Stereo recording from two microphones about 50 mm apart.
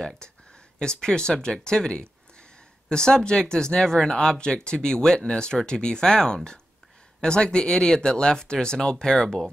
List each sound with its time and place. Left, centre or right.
0.2 s speech: centre